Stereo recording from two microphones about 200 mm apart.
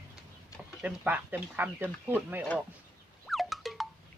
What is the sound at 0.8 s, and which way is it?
Speech, 5° right (ahead or behind).